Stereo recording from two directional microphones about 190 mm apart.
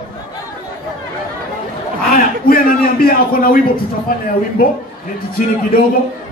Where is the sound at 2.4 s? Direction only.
50° left (ahead or behind).